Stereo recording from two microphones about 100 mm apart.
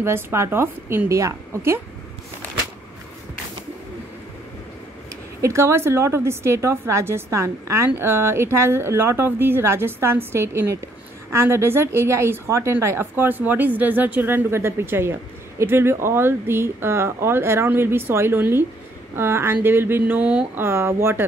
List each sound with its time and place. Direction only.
0.0 s a woman's voice: 25° right (ahead or behind)
5.4 s a woman's voice: 30° right (ahead or behind)
20.6 s a woman's voice: 25° right (ahead or behind)